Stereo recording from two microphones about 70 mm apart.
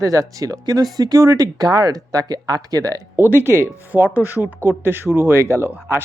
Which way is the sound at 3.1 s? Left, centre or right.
Right.